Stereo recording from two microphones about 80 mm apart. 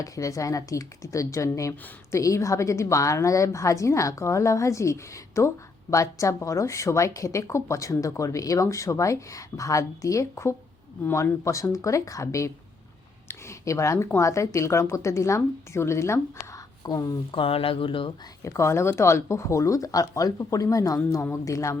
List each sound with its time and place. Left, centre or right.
0.0 s a woman's voice: left
16.8 s speech: left
17.3 s speech: left
18.4 s a woman's voice: left